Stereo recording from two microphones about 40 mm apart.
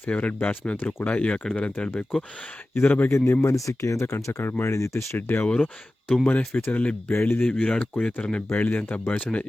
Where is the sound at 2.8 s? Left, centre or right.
Left.